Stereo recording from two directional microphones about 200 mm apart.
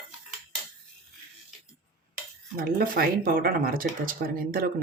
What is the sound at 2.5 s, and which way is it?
Speech, 45° right (ahead or behind).